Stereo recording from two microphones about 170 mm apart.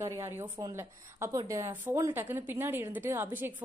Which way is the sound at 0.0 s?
15° right (ahead or behind).